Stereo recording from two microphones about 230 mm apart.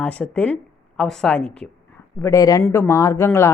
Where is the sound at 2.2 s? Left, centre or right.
Centre.